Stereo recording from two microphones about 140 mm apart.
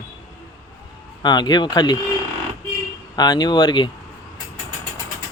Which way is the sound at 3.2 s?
30° left (ahead or behind).